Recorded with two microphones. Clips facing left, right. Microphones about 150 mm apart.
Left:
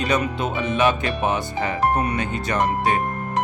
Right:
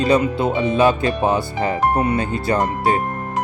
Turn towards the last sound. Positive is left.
turn(degrees=-30)  # may be behind; listen again after turning